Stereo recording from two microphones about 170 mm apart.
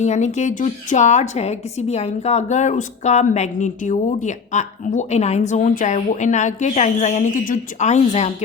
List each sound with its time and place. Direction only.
0.0 s a woman's voice: 45° left (ahead or behind)